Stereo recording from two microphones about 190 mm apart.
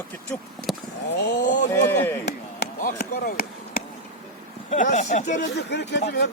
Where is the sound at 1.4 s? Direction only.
40° left (ahead or behind).